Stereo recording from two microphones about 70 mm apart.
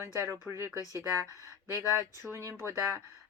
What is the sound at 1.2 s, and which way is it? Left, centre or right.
Speech, left.